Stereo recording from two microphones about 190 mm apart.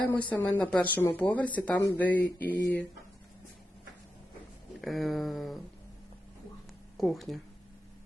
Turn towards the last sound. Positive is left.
turn(degrees=0)  # may be behind; listen again after turning